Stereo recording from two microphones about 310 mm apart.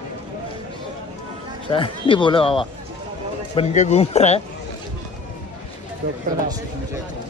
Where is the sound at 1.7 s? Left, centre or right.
Centre.